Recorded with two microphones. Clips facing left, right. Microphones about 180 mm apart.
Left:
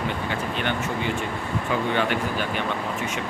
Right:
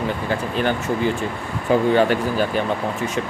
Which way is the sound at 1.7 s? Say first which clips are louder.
Right 9 dB; 40° right (ahead or behind).